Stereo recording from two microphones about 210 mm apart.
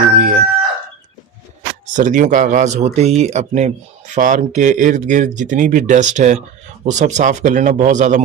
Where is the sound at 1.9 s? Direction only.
40° right (ahead or behind).